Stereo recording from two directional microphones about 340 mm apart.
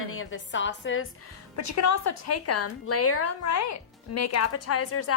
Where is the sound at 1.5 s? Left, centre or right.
Left.